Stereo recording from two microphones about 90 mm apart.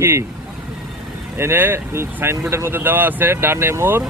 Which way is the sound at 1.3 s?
25° right (ahead or behind).